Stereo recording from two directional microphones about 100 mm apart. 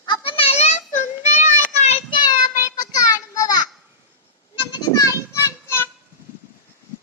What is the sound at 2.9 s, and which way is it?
Child singing, 35° left (ahead or behind).